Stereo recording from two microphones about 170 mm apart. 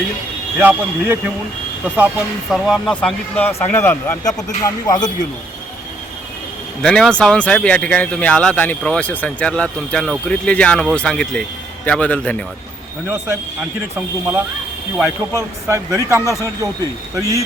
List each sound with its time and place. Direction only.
0.6 s speech: 10° right (ahead or behind); by 5.1 s 25° left (ahead or behind)
6.8 s speech: 5° left (ahead or behind)
13.1 s speech: 10° right (ahead or behind)